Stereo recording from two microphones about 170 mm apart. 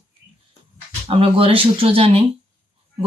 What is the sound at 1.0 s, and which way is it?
Speech, 35° right (ahead or behind).